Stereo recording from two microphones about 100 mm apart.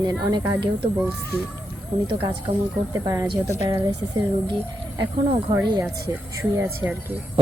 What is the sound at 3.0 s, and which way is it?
Speech, 35° right (ahead or behind).